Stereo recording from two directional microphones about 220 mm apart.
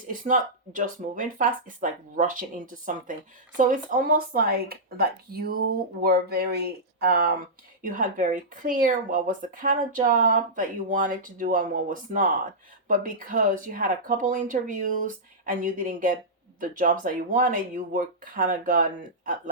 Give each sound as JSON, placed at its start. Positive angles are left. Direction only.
{"t": 0.1, "sound": "speech", "side_deg": -35}